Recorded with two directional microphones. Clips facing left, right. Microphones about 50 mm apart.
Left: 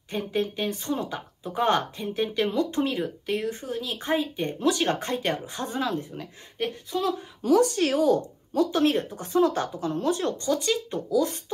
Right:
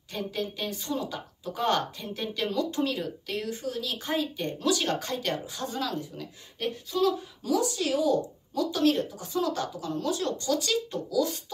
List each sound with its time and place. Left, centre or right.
0.1 s speech: left
7.4 s a woman's voice: left